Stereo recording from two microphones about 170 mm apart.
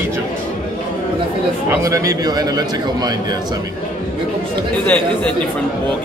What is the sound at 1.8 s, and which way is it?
A man's voice, 20° right (ahead or behind).